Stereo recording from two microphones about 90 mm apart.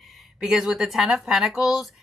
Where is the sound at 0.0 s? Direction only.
Centre (ahead or behind).